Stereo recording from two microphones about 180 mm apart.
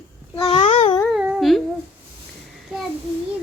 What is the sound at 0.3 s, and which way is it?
Babbling, 20° left (ahead or behind).